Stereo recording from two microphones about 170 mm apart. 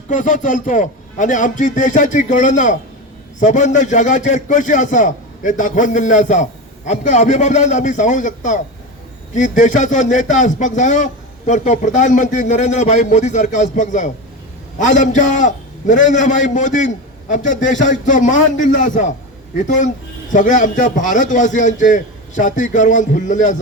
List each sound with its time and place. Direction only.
0.1 s a man's voice: 50° left (ahead or behind)